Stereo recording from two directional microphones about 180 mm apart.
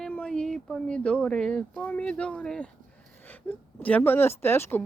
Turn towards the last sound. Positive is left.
turn(degrees=15)  # may be behind; listen again after turning